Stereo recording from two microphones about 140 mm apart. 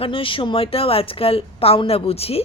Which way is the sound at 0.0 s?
40° left (ahead or behind).